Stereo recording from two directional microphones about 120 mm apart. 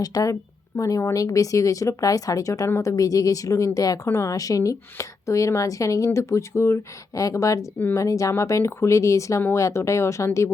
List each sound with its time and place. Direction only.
0.0 s speech: 30° left (ahead or behind)